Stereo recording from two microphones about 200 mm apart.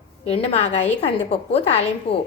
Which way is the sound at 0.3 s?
30° left (ahead or behind).